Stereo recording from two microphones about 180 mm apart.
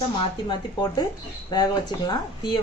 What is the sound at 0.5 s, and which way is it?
Speech, 20° left (ahead or behind).